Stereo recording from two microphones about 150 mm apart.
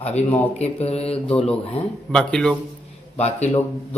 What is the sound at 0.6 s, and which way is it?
Speech, 45° left (ahead or behind).